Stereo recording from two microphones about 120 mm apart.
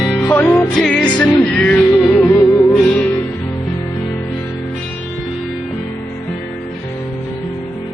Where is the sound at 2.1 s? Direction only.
20° left (ahead or behind).